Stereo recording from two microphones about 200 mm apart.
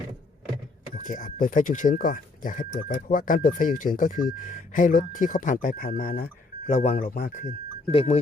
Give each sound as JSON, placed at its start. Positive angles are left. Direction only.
{"t": 0.9, "sound": "speech", "side_deg": 40}
{"t": 7.9, "sound": "speech", "side_deg": 30}